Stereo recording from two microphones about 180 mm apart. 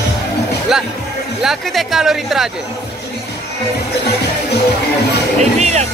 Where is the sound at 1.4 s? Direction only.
Centre (ahead or behind).